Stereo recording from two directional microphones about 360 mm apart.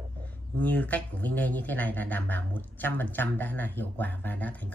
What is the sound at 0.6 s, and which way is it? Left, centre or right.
Speech, centre.